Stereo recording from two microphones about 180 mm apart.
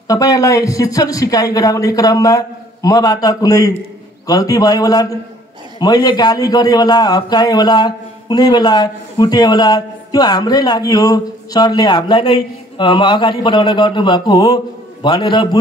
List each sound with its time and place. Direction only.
0.1 s a man's voice: 20° left (ahead or behind)